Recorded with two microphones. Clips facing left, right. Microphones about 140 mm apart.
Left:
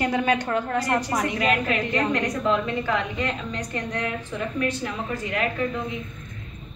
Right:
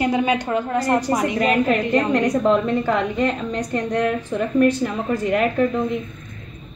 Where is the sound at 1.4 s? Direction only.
45° right (ahead or behind).